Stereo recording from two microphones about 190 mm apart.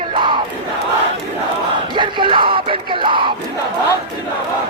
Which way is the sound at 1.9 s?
25° right (ahead or behind).